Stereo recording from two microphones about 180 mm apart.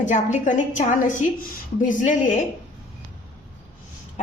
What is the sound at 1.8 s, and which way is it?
Speech, 45° left (ahead or behind).